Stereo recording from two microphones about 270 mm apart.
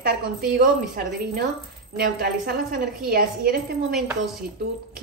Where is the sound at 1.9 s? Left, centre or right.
Right.